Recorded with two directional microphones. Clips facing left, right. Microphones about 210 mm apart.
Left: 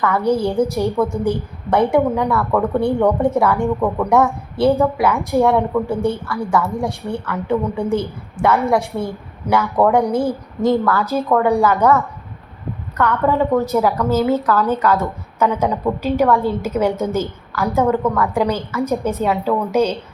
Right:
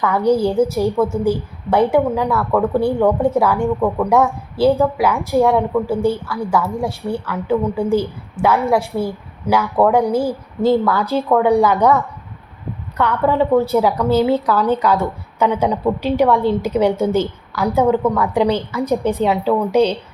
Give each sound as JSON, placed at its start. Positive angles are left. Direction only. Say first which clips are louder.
{"t": 0.0, "sound": "speech", "louder": "right 2 dB", "side_deg": -15}
{"t": 10.1, "sound": "speech", "louder": "even", "side_deg": -30}
{"t": 11.1, "sound": "speech", "louder": "right 3 dB", "side_deg": -5}